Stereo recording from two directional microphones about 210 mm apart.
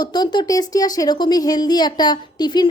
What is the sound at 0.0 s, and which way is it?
A woman's voice, 20° left (ahead or behind).